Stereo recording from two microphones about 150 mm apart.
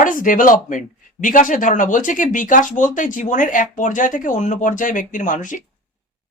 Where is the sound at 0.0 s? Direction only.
65° left (ahead or behind).